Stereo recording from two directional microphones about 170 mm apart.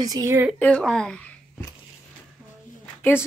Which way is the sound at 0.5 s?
5° left (ahead or behind).